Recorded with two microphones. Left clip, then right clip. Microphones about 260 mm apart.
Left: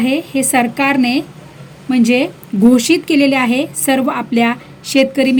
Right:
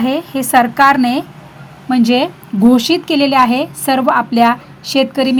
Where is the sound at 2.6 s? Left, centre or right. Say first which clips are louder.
Even; centre.